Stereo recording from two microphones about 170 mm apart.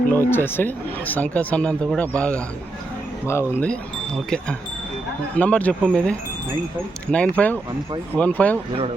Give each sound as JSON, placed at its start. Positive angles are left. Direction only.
{"t": 0.1, "sound": "speech", "side_deg": 15}
{"t": 5.4, "sound": "speech", "side_deg": 10}